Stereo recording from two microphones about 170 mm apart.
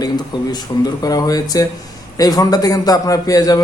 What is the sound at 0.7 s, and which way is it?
A man's voice, 25° left (ahead or behind).